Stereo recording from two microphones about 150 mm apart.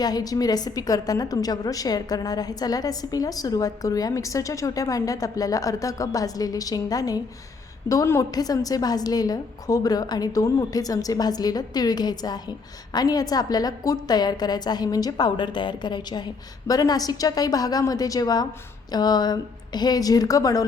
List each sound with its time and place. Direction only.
0.0 s a woman's voice: 25° left (ahead or behind)